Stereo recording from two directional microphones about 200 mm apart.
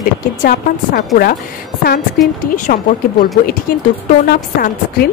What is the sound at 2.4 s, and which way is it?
Speech, 45° left (ahead or behind).